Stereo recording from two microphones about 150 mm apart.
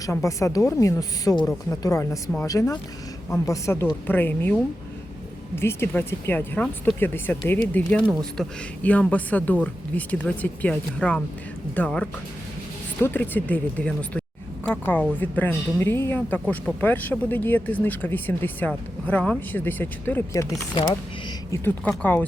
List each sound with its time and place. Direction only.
0.0 s a woman's voice: 20° left (ahead or behind)
21.8 s a man's voice: 10° left (ahead or behind)